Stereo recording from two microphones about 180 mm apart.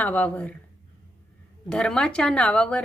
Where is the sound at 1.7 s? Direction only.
5° left (ahead or behind).